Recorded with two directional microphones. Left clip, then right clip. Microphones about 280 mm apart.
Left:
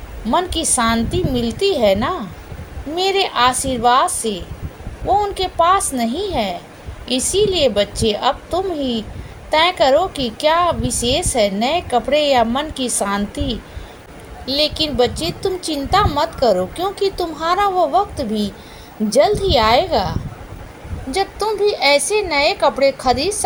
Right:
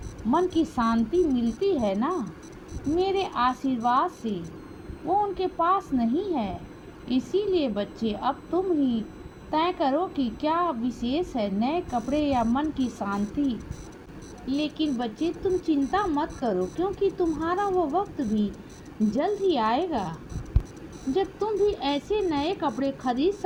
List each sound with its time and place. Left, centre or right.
0.3 s a woman's voice: right